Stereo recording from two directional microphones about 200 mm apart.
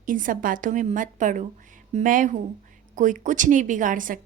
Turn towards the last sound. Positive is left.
turn(degrees=-40)  # may be behind; listen again after turning